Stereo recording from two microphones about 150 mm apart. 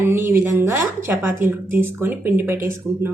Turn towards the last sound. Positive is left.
turn(degrees=-15)  # may be behind; listen again after turning